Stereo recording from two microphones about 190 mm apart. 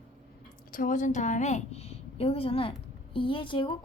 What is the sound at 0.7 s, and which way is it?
A woman's voice, 45° left (ahead or behind).